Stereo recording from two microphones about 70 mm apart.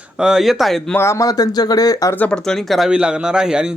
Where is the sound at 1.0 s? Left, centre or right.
Left.